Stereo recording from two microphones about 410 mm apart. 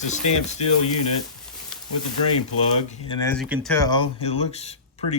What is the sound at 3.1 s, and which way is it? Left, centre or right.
Speech, centre.